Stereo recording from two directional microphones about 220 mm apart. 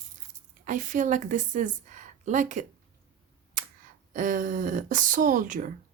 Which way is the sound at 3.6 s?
35° right (ahead or behind).